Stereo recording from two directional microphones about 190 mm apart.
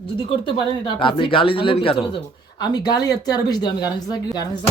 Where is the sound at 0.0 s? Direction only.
25° left (ahead or behind).